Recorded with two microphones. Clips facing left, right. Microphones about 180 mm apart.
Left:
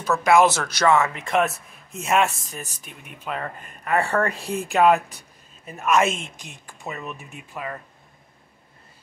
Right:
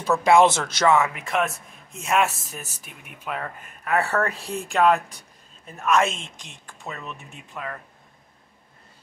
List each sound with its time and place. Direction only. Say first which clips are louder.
0.2 s speech: even; 25° right (ahead or behind)
1.2 s speech: left 3 dB; centre (ahead or behind)